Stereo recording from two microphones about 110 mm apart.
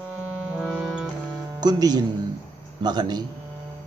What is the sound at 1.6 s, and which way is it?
A man's voice, 40° right (ahead or behind).